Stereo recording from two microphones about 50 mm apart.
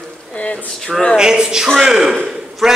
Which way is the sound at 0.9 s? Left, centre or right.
Centre.